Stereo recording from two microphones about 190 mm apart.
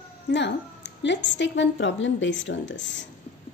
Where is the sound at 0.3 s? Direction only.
70° left (ahead or behind).